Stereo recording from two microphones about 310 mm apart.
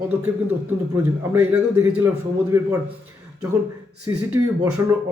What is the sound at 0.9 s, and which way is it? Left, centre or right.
Speech, centre.